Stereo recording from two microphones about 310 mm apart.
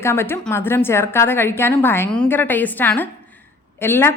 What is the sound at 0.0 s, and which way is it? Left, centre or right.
A woman's voice, centre.